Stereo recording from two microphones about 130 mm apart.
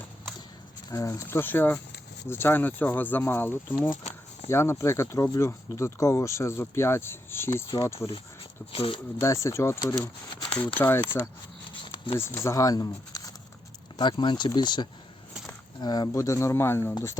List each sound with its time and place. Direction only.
0.9 s speech: 25° left (ahead or behind)
8.7 s speech: 45° left (ahead or behind)
9.1 s speech: 20° left (ahead or behind)
11.7 s a sound: 40° left (ahead or behind)
12.1 s speech: 20° left (ahead or behind)